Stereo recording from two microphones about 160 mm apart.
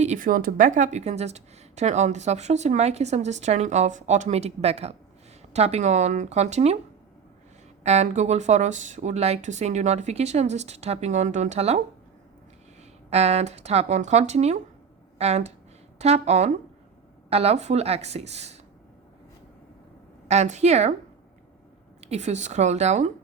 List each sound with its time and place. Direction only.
0.0 s a woman's voice: 50° right (ahead or behind)
7.9 s a woman's voice: 45° right (ahead or behind)
13.1 s a woman's voice: 40° right (ahead or behind)
20.2 s a woman's voice: 45° right (ahead or behind)
22.0 s a woman's voice: 45° right (ahead or behind)